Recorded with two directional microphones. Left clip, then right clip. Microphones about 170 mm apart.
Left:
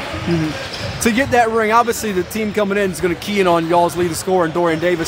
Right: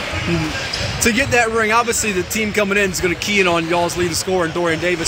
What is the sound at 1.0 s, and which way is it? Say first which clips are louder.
Speech: left 1 dB; 35° left (ahead or behind).